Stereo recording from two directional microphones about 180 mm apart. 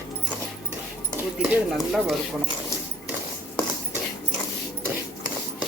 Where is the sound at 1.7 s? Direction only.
Centre (ahead or behind).